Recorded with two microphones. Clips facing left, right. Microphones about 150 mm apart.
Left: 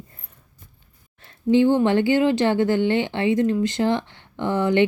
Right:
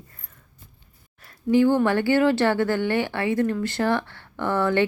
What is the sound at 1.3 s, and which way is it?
A woman's voice, 20° left (ahead or behind).